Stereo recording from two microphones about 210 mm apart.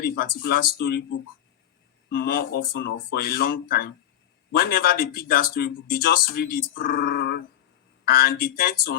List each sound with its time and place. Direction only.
0.0 s speech: 45° left (ahead or behind)
2.0 s speech: 45° left (ahead or behind)